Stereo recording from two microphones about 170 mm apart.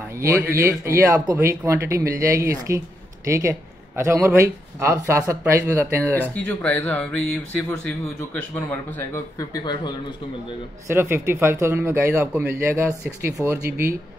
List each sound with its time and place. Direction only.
0.1 s speech: 15° right (ahead or behind)
6.1 s speech: 10° left (ahead or behind)
9.6 s a man's voice: 25° left (ahead or behind)
10.9 s speech: 15° right (ahead or behind)